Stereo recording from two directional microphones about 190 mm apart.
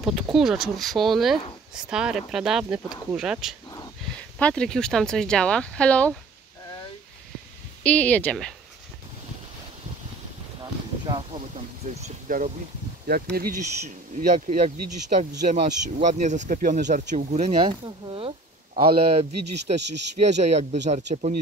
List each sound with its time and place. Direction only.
0.0 s speech: centre (ahead or behind)
7.8 s speech: 5° left (ahead or behind)
10.6 s a sound: 25° right (ahead or behind); by 12.5 s 40° right (ahead or behind)
13.0 s speech: 50° right (ahead or behind)